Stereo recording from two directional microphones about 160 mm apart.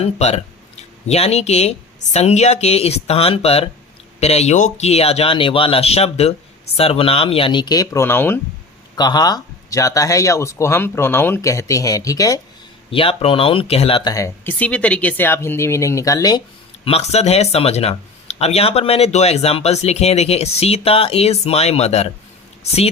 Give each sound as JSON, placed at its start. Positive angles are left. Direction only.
{"t": 0.0, "sound": "speech", "side_deg": 40}
{"t": 9.0, "sound": "speech", "side_deg": 25}
{"t": 12.9, "sound": "speech", "side_deg": 35}
{"t": 14.1, "sound": "speech", "side_deg": 20}
{"t": 16.8, "sound": "speech", "side_deg": 40}